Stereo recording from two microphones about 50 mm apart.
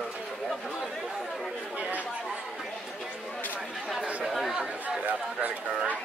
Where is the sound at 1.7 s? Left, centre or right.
Right.